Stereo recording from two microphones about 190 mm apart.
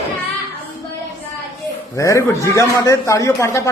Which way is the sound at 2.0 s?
15° left (ahead or behind).